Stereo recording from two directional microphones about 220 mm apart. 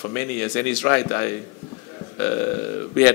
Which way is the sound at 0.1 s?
10° left (ahead or behind).